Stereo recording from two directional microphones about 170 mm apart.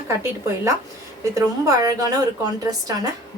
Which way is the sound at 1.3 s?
20° right (ahead or behind).